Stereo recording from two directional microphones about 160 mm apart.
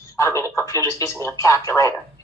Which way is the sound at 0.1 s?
15° left (ahead or behind).